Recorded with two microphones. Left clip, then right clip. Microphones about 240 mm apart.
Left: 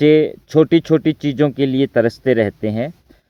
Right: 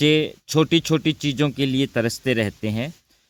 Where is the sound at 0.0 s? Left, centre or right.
Centre.